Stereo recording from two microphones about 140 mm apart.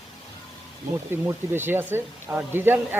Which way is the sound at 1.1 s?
15° right (ahead or behind).